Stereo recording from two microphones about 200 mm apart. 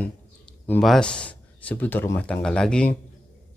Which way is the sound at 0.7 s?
5° left (ahead or behind).